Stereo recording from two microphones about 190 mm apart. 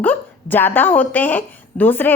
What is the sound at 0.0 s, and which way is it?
A woman's voice, 10° left (ahead or behind).